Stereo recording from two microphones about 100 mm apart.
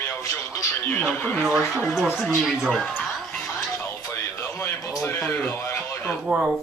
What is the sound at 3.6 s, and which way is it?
Music, 30° left (ahead or behind).